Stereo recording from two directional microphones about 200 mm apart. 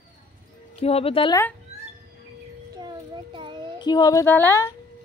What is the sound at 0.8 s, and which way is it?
Speech, 30° left (ahead or behind).